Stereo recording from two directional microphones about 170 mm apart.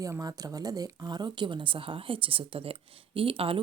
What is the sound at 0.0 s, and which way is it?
A woman's voice, 20° right (ahead or behind).